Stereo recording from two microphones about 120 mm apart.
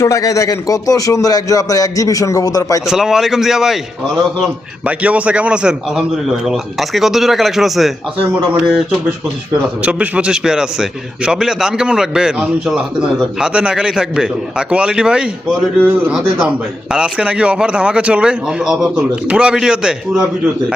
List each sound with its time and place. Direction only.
0.0 s speech: 25° left (ahead or behind)
2.8 s a man's voice: 5° right (ahead or behind)
4.9 s a man's voice: 10° right (ahead or behind)